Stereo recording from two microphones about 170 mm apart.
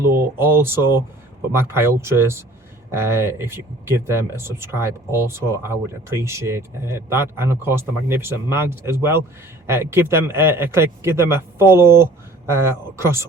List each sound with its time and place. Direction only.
0.0 s speech: 15° right (ahead or behind)